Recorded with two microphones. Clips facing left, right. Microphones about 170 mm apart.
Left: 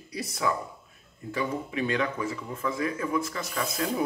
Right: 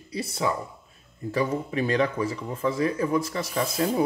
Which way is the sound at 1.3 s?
40° right (ahead or behind).